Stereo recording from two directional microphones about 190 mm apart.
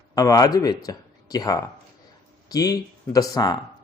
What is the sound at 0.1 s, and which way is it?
Speech, 20° left (ahead or behind).